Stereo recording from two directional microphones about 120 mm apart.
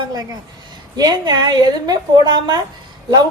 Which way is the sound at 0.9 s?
35° right (ahead or behind).